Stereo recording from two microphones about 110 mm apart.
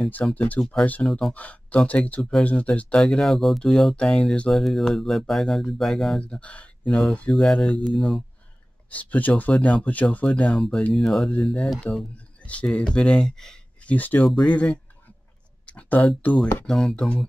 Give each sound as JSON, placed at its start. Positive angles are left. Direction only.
{"t": 0.2, "sound": "speech", "side_deg": 15}
{"t": 13.9, "sound": "speech", "side_deg": 15}
{"t": 14.2, "sound": "speech", "side_deg": 5}
{"t": 15.6, "sound": "a sound", "side_deg": 15}
{"t": 16.2, "sound": "speech", "side_deg": 15}
{"t": 16.6, "sound": "speech", "side_deg": 5}